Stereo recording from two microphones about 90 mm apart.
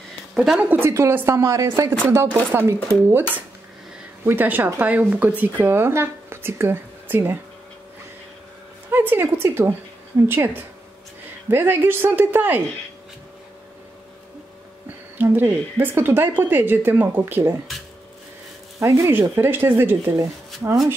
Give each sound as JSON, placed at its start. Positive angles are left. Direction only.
{"t": 0.3, "sound": "a sound", "side_deg": -5}
{"t": 0.6, "sound": "speech", "side_deg": -25}
{"t": 8.9, "sound": "speech", "side_deg": -25}
{"t": 15.1, "sound": "speech", "side_deg": -25}
{"t": 18.8, "sound": "speech", "side_deg": -30}